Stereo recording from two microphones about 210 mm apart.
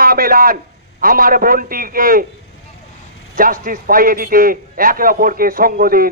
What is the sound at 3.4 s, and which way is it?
A man's voice, 40° right (ahead or behind).